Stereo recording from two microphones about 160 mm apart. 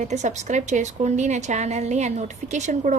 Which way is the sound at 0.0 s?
50° right (ahead or behind).